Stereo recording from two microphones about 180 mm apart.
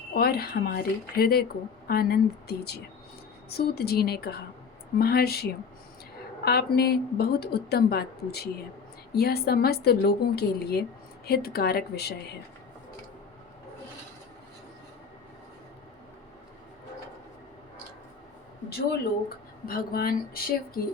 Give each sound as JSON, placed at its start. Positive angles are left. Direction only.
{"t": 0.1, "sound": "speech", "side_deg": 60}
{"t": 19.6, "sound": "speech", "side_deg": 55}